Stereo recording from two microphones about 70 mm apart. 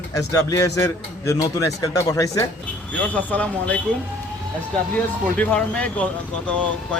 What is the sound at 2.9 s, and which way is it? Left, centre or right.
Speech, left.